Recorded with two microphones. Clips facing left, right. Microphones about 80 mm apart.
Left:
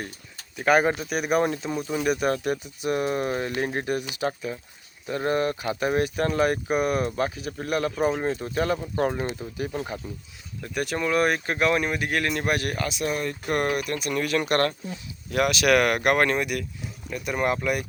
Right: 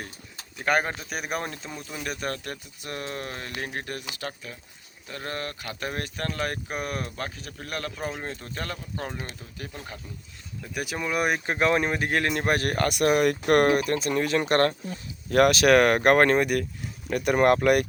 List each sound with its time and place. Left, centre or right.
0.5 s speech: centre
9.0 s speech: left
10.6 s speech: centre; by 13.6 s right
13.6 s speech: right
15.3 s speech: right
17.1 s speech: right